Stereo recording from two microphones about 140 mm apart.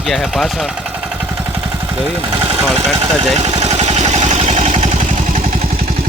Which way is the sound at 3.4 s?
50° right (ahead or behind).